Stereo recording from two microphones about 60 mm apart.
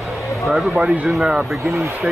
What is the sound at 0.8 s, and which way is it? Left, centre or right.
Speech, centre.